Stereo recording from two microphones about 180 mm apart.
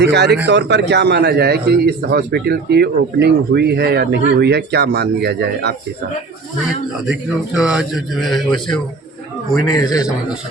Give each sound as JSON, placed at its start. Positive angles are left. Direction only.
{"t": 0.0, "sound": "a man's voice", "side_deg": -70}
{"t": 7.1, "sound": "speech", "side_deg": -5}
{"t": 9.6, "sound": "speech", "side_deg": 20}